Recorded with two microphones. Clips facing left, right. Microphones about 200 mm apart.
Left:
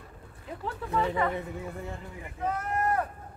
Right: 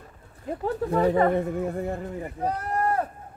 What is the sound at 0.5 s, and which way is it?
Speech, 45° right (ahead or behind).